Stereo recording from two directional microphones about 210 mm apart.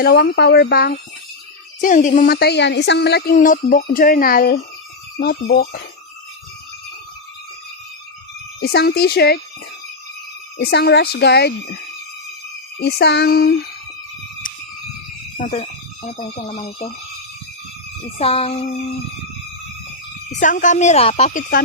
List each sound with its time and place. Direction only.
0.0 s a woman's voice: 50° left (ahead or behind)
1.8 s a woman's voice: 40° left (ahead or behind)
8.6 s a woman's voice: 50° left (ahead or behind)
10.6 s a woman's voice: 50° left (ahead or behind)
12.8 s a woman's voice: 55° left (ahead or behind)
15.4 s speech: 35° left (ahead or behind)
18.2 s child singing: 30° left (ahead or behind)
20.3 s speech: 35° left (ahead or behind)